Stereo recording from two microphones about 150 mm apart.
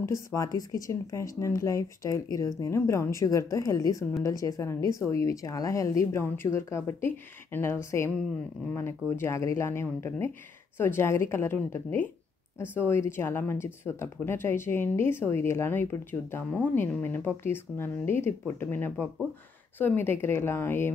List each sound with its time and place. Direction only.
0.0 s speech: 20° left (ahead or behind)